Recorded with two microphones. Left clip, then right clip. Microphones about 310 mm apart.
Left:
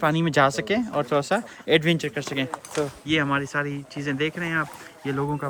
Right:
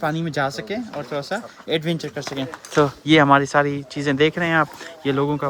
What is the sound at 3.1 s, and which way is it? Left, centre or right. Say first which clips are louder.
Speech: right 10 dB; centre.